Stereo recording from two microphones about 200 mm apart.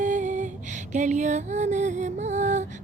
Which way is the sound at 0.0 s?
40° right (ahead or behind).